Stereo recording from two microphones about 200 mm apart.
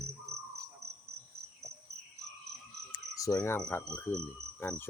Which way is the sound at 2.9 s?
15° left (ahead or behind).